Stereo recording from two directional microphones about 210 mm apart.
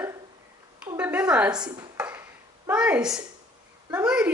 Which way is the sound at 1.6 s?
20° right (ahead or behind).